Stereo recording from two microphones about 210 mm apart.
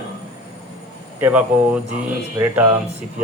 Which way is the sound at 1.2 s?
5° right (ahead or behind).